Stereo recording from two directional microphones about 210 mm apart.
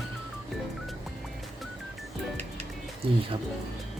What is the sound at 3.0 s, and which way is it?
Speech, 25° right (ahead or behind).